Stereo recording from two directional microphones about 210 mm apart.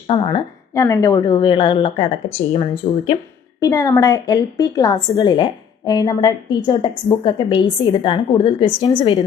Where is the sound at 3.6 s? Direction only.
15° left (ahead or behind).